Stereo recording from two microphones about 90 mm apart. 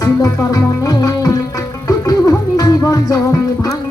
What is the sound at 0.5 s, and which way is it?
Music, 40° left (ahead or behind).